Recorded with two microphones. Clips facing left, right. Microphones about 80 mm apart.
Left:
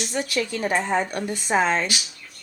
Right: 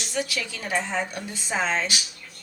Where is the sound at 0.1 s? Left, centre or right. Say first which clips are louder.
Left 1 dB; left.